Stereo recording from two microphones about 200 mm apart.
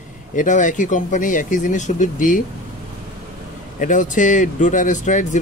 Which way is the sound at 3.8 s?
40° left (ahead or behind).